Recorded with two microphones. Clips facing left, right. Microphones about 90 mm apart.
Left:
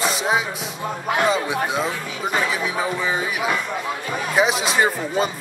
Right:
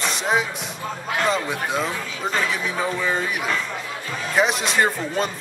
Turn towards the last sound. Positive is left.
turn(degrees=5)  # may be behind; listen again after turning